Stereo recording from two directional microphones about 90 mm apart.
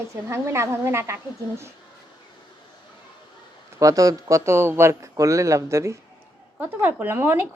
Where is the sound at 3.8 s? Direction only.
40° right (ahead or behind).